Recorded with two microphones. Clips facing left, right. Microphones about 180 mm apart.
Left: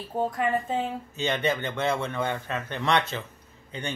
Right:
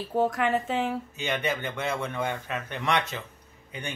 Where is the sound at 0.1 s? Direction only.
85° right.